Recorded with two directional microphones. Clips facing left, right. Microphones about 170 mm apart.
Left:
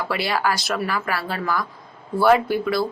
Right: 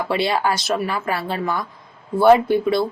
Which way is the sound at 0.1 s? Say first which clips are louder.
Right 3 dB; 25° right (ahead or behind).